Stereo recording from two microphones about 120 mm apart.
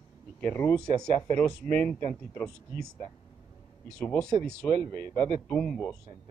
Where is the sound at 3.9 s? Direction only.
5° left (ahead or behind).